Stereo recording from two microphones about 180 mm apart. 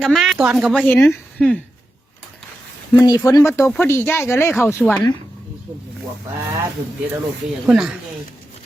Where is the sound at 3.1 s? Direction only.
20° left (ahead or behind).